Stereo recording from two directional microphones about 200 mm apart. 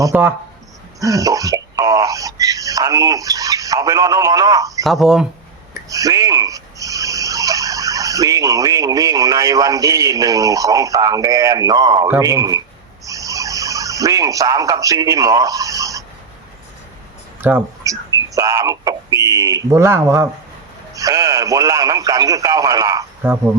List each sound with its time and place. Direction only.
0.0 s speech: 10° right (ahead or behind)
4.8 s speech: centre (ahead or behind)
5.9 s turkey: 15° right (ahead or behind)
12.1 s speech: 15° right (ahead or behind)
13.1 s a sound: 15° right (ahead or behind)
17.4 s speech: 15° right (ahead or behind)